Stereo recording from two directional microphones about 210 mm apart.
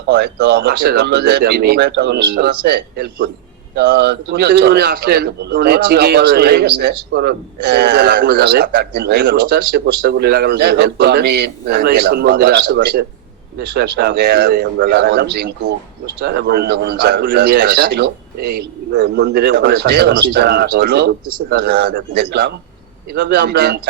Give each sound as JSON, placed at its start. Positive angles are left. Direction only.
{"t": 0.1, "sound": "a man's voice", "side_deg": -55}